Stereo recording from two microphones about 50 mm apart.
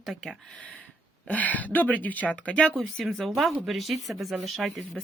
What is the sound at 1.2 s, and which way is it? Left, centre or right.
Speech, left.